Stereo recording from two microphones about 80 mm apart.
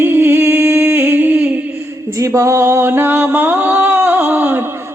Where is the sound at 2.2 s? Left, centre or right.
Right.